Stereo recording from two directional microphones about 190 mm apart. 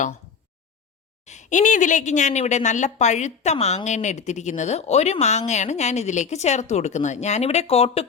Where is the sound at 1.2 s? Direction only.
40° left (ahead or behind).